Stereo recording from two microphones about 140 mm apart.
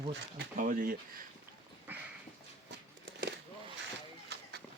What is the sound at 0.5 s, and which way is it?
Speech, 80° right.